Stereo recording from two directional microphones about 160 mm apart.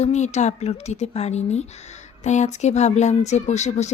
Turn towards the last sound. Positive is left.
turn(degrees=45)  # may be behind; listen again after turning